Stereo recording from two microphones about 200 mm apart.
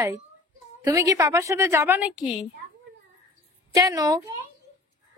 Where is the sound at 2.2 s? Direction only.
25° left (ahead or behind).